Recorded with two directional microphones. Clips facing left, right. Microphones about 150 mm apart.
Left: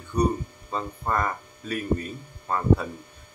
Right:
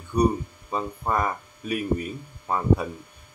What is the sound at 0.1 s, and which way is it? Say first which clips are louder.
Speech: right 2 dB; 10° right (ahead or behind).